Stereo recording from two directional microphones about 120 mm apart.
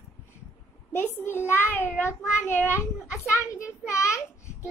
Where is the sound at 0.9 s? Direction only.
15° left (ahead or behind).